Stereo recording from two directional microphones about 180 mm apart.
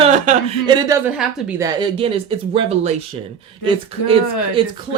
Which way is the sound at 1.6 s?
25° right (ahead or behind).